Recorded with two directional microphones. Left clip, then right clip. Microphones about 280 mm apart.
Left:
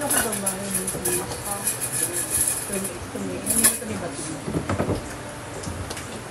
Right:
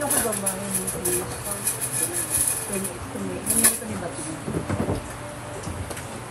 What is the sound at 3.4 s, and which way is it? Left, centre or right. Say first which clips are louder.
Speech: even; centre.